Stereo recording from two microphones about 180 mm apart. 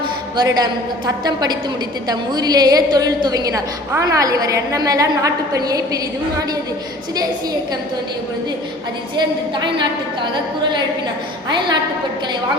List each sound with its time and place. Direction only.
0.3 s a woman's voice: 20° right (ahead or behind)
9.1 s a woman's voice: 25° right (ahead or behind)
11.4 s a woman's voice: 25° right (ahead or behind)